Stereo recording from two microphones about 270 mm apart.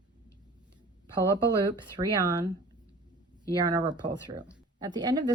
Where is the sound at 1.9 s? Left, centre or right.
Centre.